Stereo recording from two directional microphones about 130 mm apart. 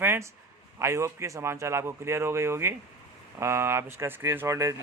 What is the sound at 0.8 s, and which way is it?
Speech, 20° right (ahead or behind).